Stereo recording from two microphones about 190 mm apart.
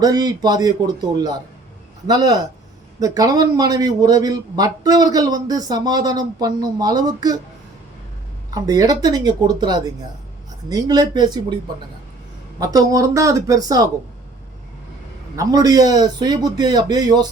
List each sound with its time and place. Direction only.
0.0 s speech: 20° right (ahead or behind)
8.5 s speech: 20° right (ahead or behind)
12.5 s speech: 20° right (ahead or behind)
15.4 s speech: 20° right (ahead or behind)